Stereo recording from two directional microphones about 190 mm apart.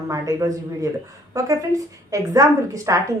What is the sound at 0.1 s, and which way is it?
A woman's voice, 15° right (ahead or behind).